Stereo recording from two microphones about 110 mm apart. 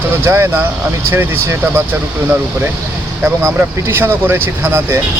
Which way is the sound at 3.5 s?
20° right (ahead or behind).